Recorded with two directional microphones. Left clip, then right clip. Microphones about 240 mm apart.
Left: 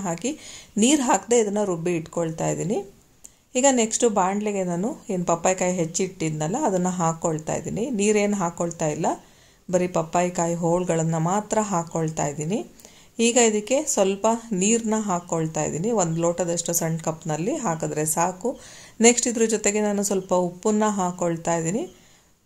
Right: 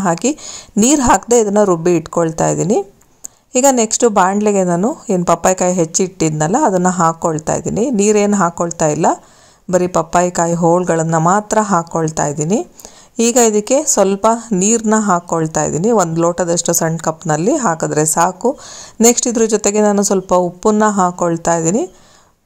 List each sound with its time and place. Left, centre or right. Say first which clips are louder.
0.0 s a woman's voice: right 12 dB; right